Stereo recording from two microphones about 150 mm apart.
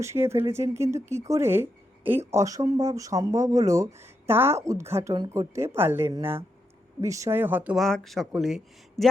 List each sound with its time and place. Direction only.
0.0 s speech: 15° right (ahead or behind)
7.8 s speech: centre (ahead or behind)